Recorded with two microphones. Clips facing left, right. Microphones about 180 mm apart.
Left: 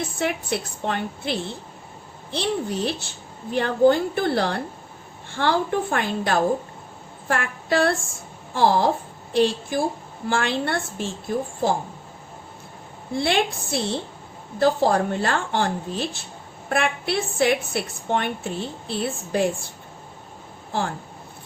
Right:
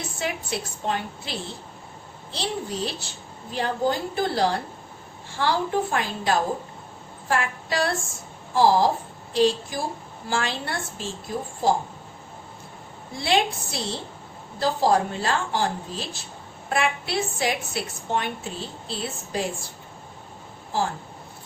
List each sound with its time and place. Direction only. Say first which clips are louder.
0.2 s a woman's voice: left 3 dB; 60° left (ahead or behind)
7.3 s child singing: left 2 dB; 55° left (ahead or behind)
8.5 s a woman's voice: even; 60° left (ahead or behind)
13.1 s a woman's voice: left 1 dB; 55° left (ahead or behind)